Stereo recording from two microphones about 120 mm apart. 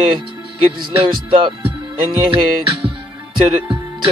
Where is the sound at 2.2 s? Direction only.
45° right (ahead or behind).